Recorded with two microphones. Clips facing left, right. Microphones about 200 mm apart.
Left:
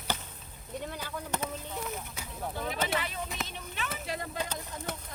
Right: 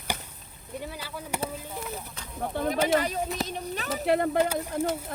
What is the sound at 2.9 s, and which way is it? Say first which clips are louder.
Speech: right 9 dB; 40° right (ahead or behind).